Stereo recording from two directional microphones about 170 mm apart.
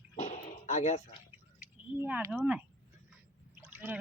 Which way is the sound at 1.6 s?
10° right (ahead or behind).